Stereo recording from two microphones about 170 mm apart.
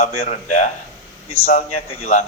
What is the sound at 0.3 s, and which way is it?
Speech, 45° left (ahead or behind).